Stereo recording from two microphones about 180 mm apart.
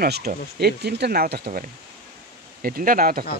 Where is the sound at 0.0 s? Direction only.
60° right (ahead or behind).